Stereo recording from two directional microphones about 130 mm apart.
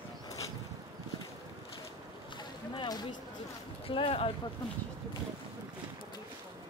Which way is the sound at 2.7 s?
35° left (ahead or behind).